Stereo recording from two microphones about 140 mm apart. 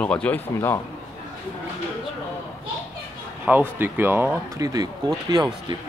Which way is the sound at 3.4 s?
15° right (ahead or behind).